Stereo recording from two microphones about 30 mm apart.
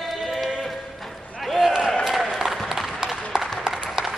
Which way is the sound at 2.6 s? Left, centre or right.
Centre.